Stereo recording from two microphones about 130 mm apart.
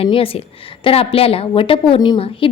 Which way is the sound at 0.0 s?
45° left (ahead or behind).